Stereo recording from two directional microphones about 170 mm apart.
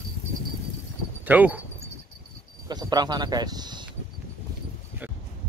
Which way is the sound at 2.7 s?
25° right (ahead or behind).